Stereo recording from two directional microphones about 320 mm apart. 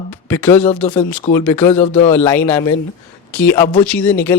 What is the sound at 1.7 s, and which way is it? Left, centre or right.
Speech, left.